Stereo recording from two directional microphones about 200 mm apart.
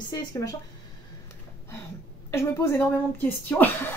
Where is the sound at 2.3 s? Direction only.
15° left (ahead or behind).